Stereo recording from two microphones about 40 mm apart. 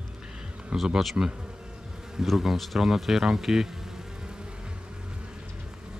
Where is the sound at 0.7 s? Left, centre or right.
Centre.